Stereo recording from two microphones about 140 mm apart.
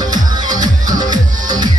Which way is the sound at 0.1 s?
30° right (ahead or behind).